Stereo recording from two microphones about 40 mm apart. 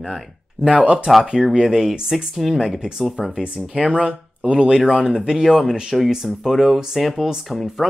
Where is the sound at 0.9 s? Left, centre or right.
Centre.